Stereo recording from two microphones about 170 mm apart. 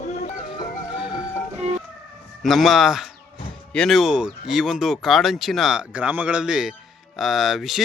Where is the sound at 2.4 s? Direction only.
Centre (ahead or behind).